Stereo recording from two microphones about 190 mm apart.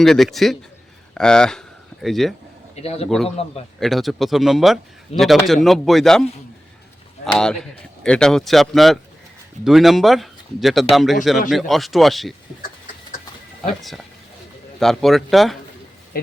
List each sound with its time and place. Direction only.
0.0 s speech: centre (ahead or behind)
2.7 s a man's voice: 30° left (ahead or behind)
3.8 s speech: centre (ahead or behind)
7.3 s speech: 5° left (ahead or behind)
14.8 s speech: centre (ahead or behind)
16.1 s a sound: 55° left (ahead or behind)